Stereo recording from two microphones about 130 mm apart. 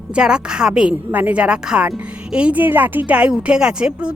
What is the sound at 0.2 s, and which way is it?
A woman's voice, 5° right (ahead or behind).